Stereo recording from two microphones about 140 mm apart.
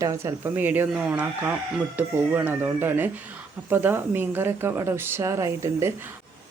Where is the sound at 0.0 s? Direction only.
20° right (ahead or behind).